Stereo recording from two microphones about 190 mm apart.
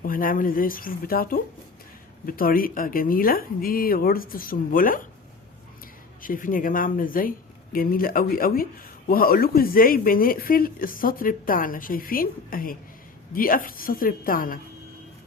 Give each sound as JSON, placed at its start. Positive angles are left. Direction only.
{"t": 0.0, "sound": "speech", "side_deg": 45}
{"t": 6.2, "sound": "speech", "side_deg": 45}